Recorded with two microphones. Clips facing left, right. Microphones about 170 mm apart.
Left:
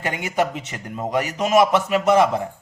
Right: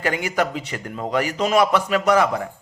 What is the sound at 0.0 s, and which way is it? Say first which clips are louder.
Speech: right 1 dB; 20° left (ahead or behind).